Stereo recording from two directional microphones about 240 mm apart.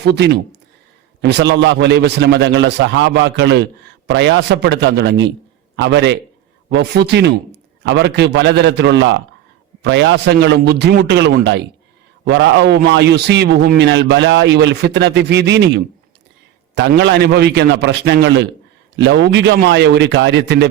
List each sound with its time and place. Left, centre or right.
0.0 s a man's voice: right